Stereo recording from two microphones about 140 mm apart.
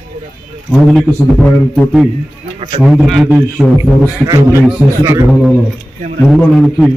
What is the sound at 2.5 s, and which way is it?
Speech, 45° right (ahead or behind).